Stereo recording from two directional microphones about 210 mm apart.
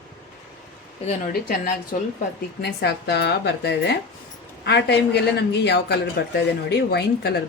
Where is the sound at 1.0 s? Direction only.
40° left (ahead or behind).